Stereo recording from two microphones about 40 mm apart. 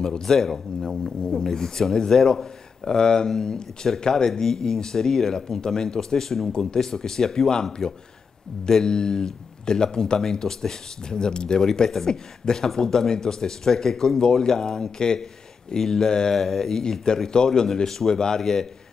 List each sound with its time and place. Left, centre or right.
0.0 s speech: centre